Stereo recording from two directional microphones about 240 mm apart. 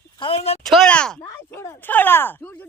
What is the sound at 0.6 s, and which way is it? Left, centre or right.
Speech, centre.